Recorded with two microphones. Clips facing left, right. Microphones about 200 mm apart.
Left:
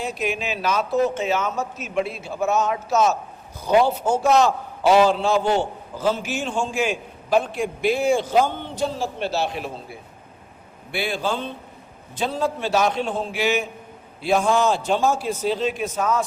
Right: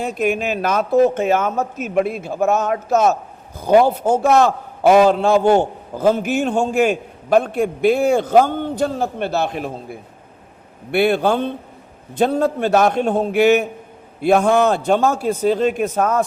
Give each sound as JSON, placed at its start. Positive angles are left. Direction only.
{"t": 0.0, "sound": "a man's voice", "side_deg": -50}